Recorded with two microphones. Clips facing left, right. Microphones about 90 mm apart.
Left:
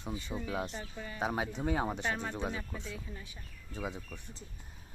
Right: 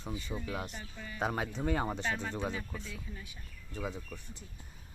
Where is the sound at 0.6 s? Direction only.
30° left (ahead or behind).